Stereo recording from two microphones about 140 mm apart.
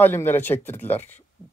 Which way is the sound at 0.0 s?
15° left (ahead or behind).